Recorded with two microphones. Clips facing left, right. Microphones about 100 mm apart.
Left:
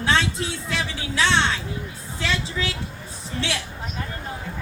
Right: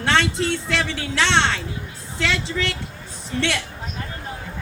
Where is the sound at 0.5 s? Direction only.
70° right (ahead or behind).